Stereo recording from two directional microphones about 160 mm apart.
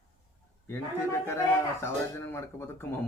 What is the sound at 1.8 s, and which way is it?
Speech, 15° left (ahead or behind).